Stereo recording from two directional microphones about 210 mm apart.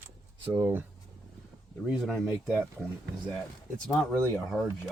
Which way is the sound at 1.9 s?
Centre (ahead or behind).